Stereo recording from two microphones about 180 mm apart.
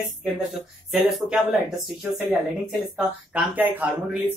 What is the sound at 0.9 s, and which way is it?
Speech, centre (ahead or behind).